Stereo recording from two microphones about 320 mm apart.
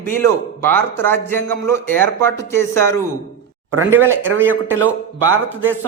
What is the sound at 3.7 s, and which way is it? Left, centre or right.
Speech, right.